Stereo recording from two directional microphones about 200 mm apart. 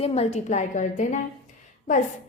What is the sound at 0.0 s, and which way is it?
A woman's voice, 30° left (ahead or behind).